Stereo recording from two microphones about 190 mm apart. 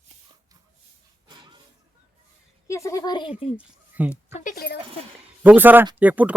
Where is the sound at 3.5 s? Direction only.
5° right (ahead or behind).